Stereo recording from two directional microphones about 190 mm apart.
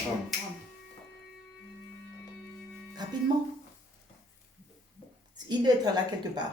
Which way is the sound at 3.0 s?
20° right (ahead or behind).